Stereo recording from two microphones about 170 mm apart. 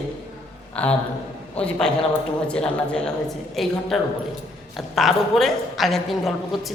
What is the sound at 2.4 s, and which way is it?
A woman's voice, 5° left (ahead or behind).